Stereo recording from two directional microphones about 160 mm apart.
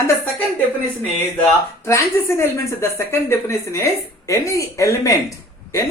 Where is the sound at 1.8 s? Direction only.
15° left (ahead or behind).